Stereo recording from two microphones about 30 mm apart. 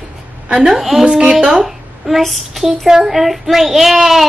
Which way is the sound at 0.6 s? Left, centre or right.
Centre.